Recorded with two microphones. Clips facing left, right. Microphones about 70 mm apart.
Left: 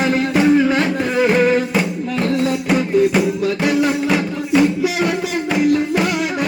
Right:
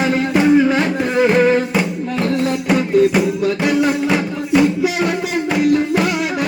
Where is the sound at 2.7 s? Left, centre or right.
Centre.